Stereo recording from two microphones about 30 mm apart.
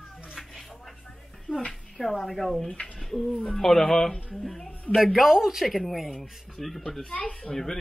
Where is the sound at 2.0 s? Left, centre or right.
Centre.